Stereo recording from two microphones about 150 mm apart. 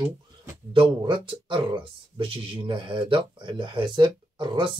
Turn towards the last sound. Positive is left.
turn(degrees=-35)  # may be behind; listen again after turning